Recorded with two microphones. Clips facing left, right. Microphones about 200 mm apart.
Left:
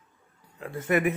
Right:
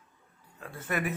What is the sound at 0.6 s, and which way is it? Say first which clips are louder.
Speech: left 8 dB; 15° left (ahead or behind).